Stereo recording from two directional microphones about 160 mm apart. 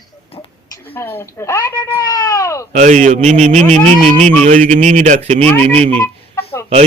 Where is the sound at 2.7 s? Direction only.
50° right (ahead or behind).